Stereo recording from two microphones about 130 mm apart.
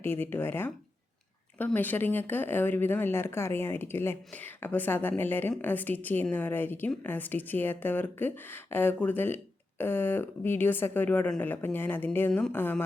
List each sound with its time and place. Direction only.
0.0 s speech: 15° left (ahead or behind)